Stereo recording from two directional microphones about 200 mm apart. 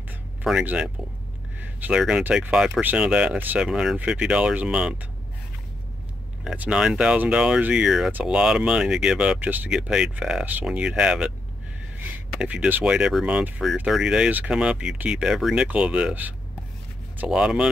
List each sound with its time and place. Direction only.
0.4 s speech: 5° right (ahead or behind)
6.4 s speech: 5° right (ahead or behind)